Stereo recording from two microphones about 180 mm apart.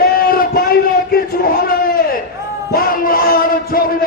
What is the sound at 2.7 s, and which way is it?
A man's voice, 55° left (ahead or behind).